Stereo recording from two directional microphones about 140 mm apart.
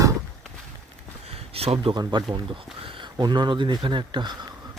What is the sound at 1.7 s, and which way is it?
Speech, 30° right (ahead or behind).